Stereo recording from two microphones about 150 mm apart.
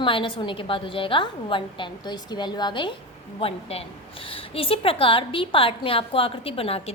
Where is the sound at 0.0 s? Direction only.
35° left (ahead or behind).